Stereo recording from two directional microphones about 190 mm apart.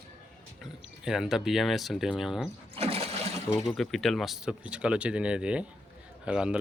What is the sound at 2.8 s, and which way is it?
Water, 30° right (ahead or behind).